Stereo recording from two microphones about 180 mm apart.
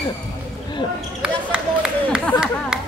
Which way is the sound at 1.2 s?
5° right (ahead or behind).